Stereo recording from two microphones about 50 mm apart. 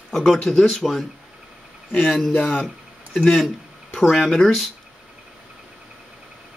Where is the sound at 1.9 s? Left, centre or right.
Centre.